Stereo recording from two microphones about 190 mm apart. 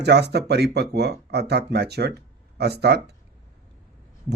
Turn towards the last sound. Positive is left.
turn(degrees=-60)  # may be behind; listen again after turning